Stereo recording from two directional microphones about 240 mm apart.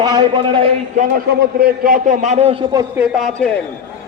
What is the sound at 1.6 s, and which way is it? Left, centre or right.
A man's voice, right.